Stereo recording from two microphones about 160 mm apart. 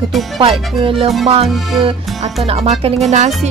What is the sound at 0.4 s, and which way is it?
Speech, 35° right (ahead or behind).